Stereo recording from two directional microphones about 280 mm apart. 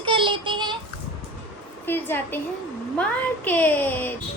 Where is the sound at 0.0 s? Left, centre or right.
Centre.